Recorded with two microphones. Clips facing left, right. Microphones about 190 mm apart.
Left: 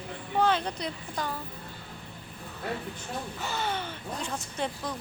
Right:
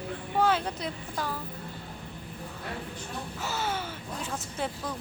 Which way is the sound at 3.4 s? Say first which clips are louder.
Right 1 dB; 5° right (ahead or behind).